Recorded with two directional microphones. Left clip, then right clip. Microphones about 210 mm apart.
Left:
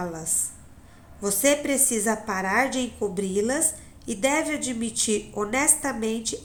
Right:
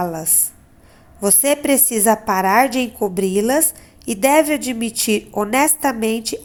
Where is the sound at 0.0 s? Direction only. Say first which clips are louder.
Right 8 dB; 35° right (ahead or behind).